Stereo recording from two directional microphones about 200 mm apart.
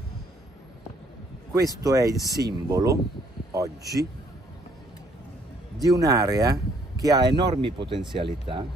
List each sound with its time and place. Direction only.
1.5 s speech: 15° right (ahead or behind)
5.9 s speech: 15° right (ahead or behind)